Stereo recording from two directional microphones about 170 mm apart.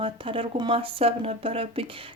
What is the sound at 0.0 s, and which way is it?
Speech, 30° right (ahead or behind).